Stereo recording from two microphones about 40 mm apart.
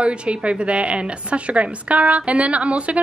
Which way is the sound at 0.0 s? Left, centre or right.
Right.